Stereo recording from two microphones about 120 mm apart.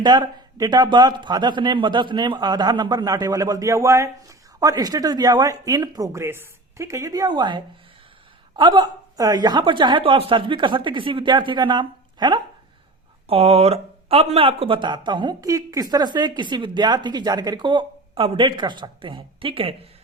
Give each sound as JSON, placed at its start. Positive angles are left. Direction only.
{"t": 0.0, "sound": "a man's voice", "side_deg": -35}
{"t": 13.2, "sound": "a man's voice", "side_deg": -55}